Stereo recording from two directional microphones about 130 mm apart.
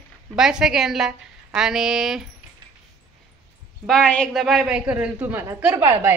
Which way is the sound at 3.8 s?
5° left (ahead or behind).